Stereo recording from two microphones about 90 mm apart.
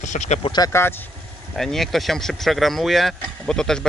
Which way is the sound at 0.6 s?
45° left (ahead or behind).